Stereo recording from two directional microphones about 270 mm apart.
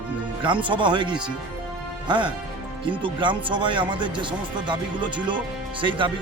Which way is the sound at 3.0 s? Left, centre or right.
Centre.